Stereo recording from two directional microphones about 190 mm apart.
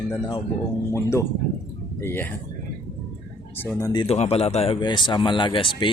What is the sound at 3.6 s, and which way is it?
Speech, 15° left (ahead or behind).